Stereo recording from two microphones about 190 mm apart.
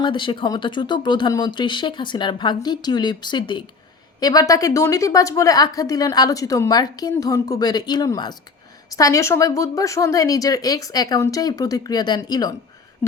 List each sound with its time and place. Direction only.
0.0 s a woman's voice: 25° left (ahead or behind)